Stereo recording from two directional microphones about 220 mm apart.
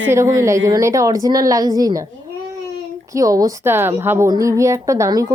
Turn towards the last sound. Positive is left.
turn(degrees=-15)  # may be behind; listen again after turning